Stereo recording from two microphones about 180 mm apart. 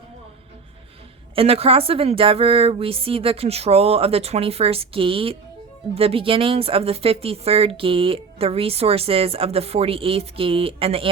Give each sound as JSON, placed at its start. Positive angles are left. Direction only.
{"t": 1.4, "sound": "a woman's voice", "side_deg": -35}